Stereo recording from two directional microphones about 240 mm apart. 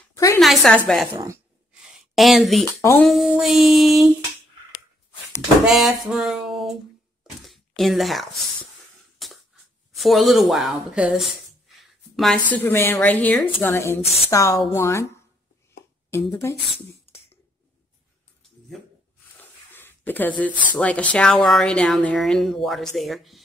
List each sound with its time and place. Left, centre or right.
0.1 s a sound: centre
0.4 s speech: centre
1.1 s speech: centre
1.7 s a sound: centre
2.8 s a woman's voice: centre
3.1 s speech: centre
5.7 s speech: centre
9.2 s a sound: centre
9.9 s a woman's voice: centre
14.0 s a woman's voice: left
14.3 s a woman's voice: centre
16.1 s a woman's voice: centre
19.3 s a sound: centre
20.7 s speech: centre